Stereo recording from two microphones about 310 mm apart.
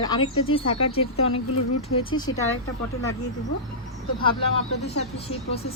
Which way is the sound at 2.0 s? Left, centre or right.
Centre.